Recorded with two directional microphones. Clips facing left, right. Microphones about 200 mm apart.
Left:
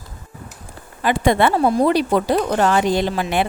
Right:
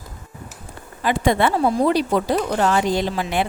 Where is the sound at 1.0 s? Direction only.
65° left (ahead or behind).